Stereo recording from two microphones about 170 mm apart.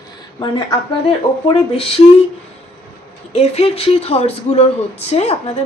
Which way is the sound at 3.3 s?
35° left (ahead or behind).